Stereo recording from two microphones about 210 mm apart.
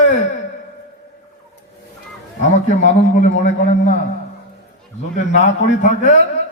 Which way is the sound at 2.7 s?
35° left (ahead or behind).